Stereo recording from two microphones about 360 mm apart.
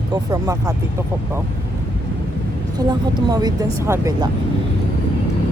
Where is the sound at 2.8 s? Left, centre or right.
Centre.